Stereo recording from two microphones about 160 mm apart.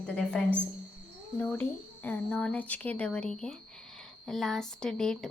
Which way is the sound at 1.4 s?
10° left (ahead or behind).